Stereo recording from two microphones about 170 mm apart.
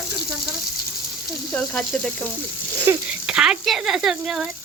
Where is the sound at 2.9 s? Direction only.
15° right (ahead or behind).